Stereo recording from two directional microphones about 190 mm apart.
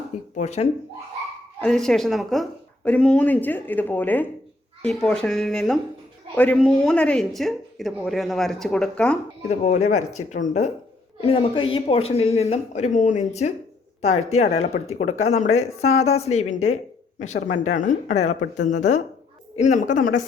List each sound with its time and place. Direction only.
0.3 s speech: 35° left (ahead or behind)
1.6 s speech: centre (ahead or behind)
9.5 s speech: 35° left (ahead or behind)
11.2 s a woman's voice: 30° left (ahead or behind)
19.5 s speech: 40° left (ahead or behind)